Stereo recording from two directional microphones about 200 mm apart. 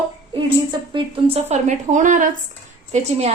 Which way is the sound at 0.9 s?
25° right (ahead or behind).